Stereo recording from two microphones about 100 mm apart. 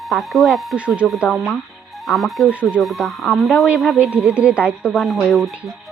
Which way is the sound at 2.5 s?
15° right (ahead or behind).